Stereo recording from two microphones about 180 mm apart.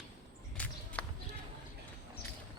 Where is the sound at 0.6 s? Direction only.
5° left (ahead or behind).